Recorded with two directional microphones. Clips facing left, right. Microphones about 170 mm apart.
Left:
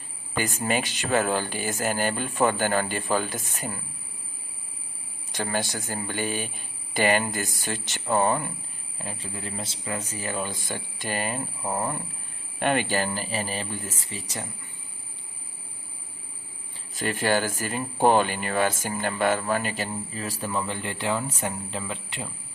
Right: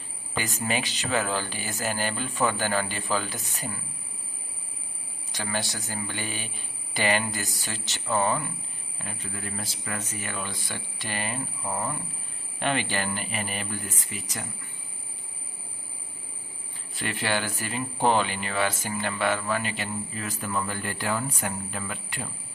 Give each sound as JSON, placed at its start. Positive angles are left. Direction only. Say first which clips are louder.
{"t": 0.3, "sound": "speech", "louder": "left 3 dB", "side_deg": 50}
{"t": 5.3, "sound": "speech", "louder": "left 3 dB", "side_deg": 50}
{"t": 9.0, "sound": "speech", "louder": "left 2 dB", "side_deg": 30}
{"t": 12.5, "sound": "speech", "louder": "left 4 dB", "side_deg": 50}
{"t": 13.1, "sound": "speech", "louder": "left 2 dB", "side_deg": 35}
{"t": 16.9, "sound": "speech", "louder": "left 5 dB", "side_deg": 40}